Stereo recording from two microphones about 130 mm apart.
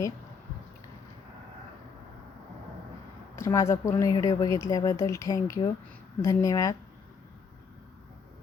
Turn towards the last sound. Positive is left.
turn(degrees=25)  # may be behind; listen again after turning